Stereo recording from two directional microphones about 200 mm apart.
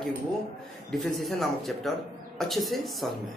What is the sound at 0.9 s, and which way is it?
Speech, centre (ahead or behind).